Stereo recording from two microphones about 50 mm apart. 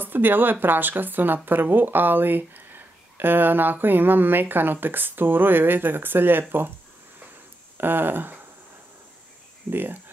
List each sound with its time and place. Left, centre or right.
0.0 s speech: right
7.7 s speech: right
9.7 s speech: right